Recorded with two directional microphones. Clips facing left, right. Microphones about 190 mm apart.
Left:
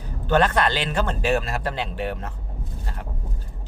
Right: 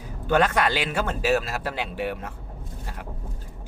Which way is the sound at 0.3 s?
10° right (ahead or behind).